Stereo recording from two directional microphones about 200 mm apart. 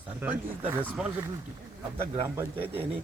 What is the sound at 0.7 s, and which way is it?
Speech, 10° right (ahead or behind).